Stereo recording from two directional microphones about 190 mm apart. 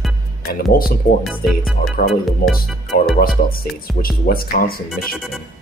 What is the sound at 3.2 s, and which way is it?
Speech, 50° left (ahead or behind).